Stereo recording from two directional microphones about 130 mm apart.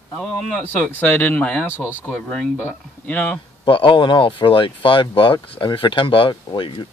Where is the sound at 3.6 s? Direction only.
40° left (ahead or behind).